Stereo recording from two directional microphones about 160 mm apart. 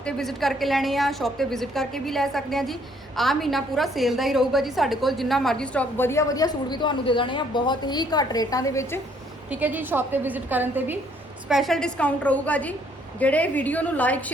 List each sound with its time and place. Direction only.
0.0 s a woman's voice: centre (ahead or behind); by 9.0 s 20° left (ahead or behind)
9.5 s a woman's voice: 10° right (ahead or behind)
11.4 s a woman's voice: centre (ahead or behind)